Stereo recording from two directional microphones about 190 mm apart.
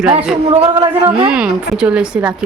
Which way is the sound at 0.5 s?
30° right (ahead or behind).